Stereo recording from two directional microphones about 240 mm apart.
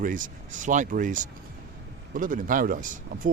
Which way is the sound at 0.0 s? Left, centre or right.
Right.